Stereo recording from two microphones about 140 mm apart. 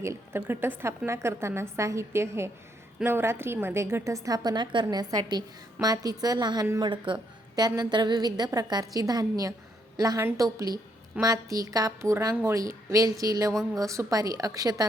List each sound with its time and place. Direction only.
0.3 s a woman's voice: 15° right (ahead or behind)